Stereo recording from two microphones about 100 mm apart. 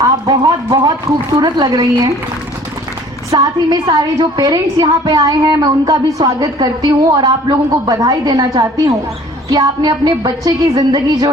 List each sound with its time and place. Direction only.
0.3 s speech: 40° right (ahead or behind)
3.3 s a woman's voice: 45° right (ahead or behind)